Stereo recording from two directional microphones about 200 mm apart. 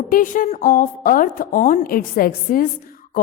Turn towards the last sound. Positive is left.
turn(degrees=45)  # may be behind; listen again after turning